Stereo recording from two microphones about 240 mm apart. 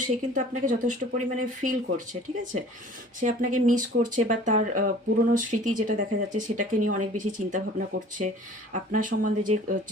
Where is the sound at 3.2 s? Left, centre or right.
Right.